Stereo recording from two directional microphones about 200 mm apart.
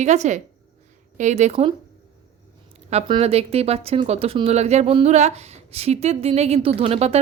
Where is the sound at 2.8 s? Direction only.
30° right (ahead or behind).